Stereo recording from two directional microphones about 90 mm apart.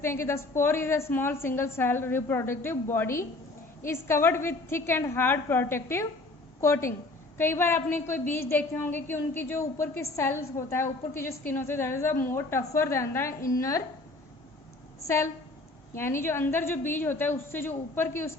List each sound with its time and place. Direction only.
0.0 s a woman's voice: 30° left (ahead or behind)
15.0 s a woman's voice: 30° left (ahead or behind)